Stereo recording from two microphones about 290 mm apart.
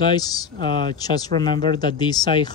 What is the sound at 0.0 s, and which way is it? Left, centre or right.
Speech, centre.